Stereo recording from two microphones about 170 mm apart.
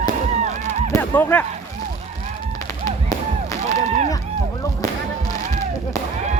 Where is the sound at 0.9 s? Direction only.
10° left (ahead or behind).